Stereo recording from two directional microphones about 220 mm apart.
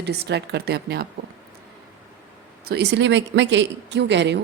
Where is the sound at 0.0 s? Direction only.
50° right (ahead or behind).